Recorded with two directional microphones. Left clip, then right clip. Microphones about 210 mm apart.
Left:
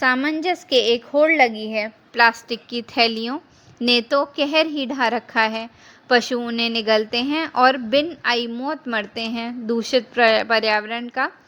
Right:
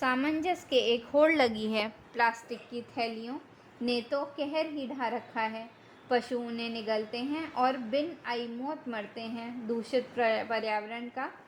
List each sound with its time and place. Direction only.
0.0 s a woman's voice: 25° left (ahead or behind); by 1.9 s 5° left (ahead or behind)
2.1 s a woman's voice: 30° left (ahead or behind)